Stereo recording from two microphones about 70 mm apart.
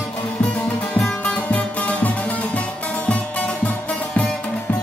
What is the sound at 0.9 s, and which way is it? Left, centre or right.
Music, centre.